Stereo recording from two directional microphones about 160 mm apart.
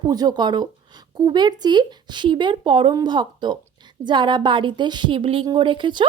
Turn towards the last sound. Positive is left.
turn(degrees=-30)  # may be behind; listen again after turning